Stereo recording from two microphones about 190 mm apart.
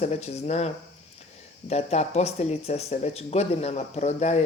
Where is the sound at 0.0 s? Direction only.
35° left (ahead or behind).